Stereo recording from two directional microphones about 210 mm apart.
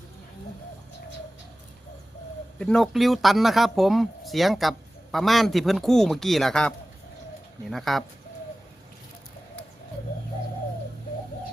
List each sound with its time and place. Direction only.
2.6 s speech: 5° left (ahead or behind)